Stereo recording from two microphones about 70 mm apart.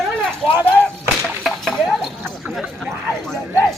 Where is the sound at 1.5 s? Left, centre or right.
Centre.